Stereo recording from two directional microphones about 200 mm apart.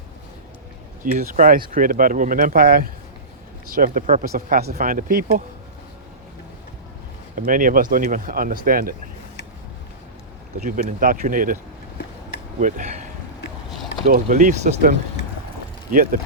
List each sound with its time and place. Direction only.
1.0 s speech: 40° right (ahead or behind)
7.3 s speech: 45° right (ahead or behind)
10.6 s speech: 40° right (ahead or behind)
14.1 s speech: 40° right (ahead or behind)